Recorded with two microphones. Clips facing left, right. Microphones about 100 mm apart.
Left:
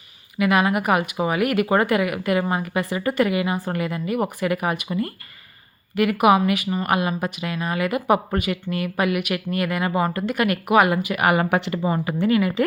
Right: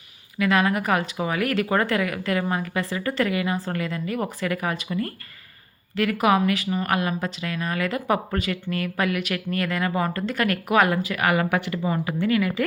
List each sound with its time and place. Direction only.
0.3 s speech: 15° left (ahead or behind)